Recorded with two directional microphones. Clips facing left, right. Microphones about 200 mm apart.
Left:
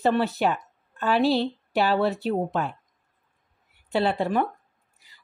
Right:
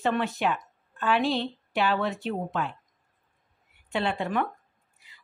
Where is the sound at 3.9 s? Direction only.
35° left (ahead or behind).